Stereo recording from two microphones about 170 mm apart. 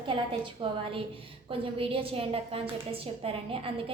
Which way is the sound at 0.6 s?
30° right (ahead or behind).